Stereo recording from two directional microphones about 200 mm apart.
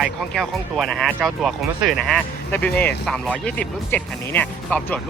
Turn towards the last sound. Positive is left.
turn(degrees=10)  # may be behind; listen again after turning